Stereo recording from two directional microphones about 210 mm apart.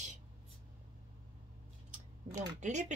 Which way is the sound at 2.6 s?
35° right (ahead or behind).